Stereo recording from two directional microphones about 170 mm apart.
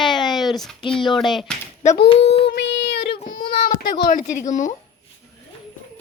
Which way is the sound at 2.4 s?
90° left.